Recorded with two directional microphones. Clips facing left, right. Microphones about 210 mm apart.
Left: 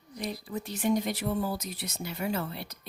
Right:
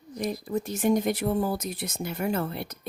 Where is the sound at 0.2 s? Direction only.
45° right (ahead or behind).